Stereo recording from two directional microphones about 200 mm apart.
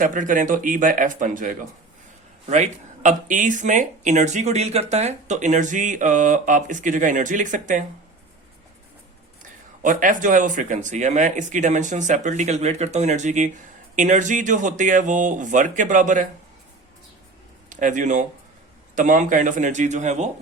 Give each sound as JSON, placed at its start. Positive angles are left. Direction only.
{"t": 0.0, "sound": "speech", "side_deg": -40}
{"t": 9.4, "sound": "speech", "side_deg": -40}
{"t": 17.7, "sound": "speech", "side_deg": -40}